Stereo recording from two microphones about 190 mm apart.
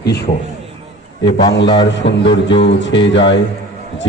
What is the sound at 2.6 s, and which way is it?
Speech, 70° left (ahead or behind).